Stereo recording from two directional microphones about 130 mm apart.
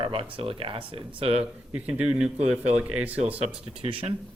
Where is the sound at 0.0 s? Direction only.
40° right (ahead or behind).